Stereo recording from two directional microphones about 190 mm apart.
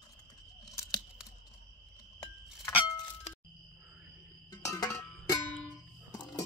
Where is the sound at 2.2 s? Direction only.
20° left (ahead or behind).